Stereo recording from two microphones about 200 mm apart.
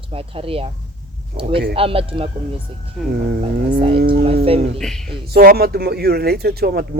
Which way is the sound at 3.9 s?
50° right (ahead or behind).